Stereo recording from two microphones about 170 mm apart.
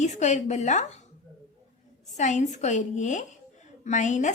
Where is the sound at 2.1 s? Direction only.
45° left (ahead or behind).